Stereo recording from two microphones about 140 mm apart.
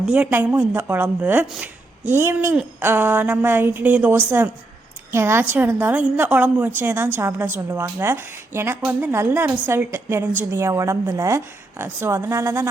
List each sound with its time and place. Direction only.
0.0 s a woman's voice: 10° right (ahead or behind)